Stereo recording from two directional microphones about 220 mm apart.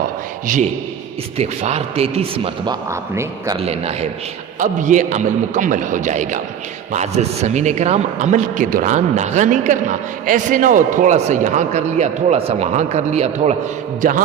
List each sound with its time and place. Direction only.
0.4 s a man's voice: 35° right (ahead or behind)
2.9 s speech: 15° right (ahead or behind)
3.7 s a man's voice: 30° right (ahead or behind)